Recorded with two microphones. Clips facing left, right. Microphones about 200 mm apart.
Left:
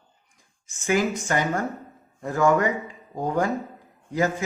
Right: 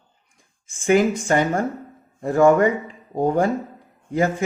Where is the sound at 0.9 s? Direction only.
25° right (ahead or behind).